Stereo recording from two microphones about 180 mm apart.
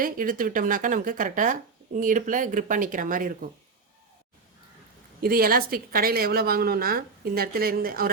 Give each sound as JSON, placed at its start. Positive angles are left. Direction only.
{"t": 0.0, "sound": "speech", "side_deg": -50}
{"t": 5.2, "sound": "a woman's voice", "side_deg": -55}